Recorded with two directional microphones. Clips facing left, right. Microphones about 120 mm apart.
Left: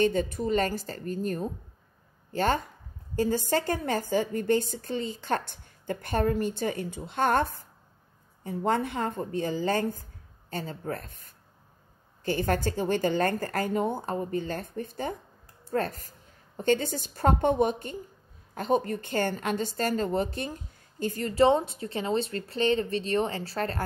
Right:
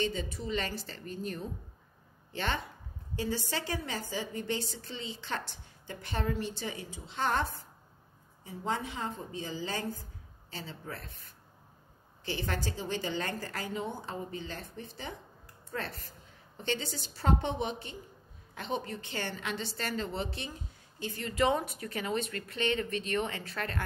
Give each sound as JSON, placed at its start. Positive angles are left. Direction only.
{"t": 0.0, "sound": "a woman's voice", "side_deg": 50}